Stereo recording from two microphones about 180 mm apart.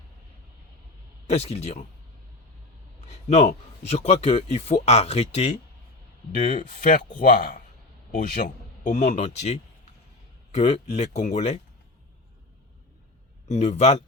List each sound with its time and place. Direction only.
1.3 s speech: 35° left (ahead or behind)
3.1 s speech: 40° left (ahead or behind)
13.5 s speech: 40° left (ahead or behind)